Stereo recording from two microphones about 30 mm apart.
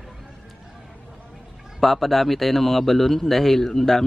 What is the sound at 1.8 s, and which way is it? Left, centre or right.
A man's voice, centre.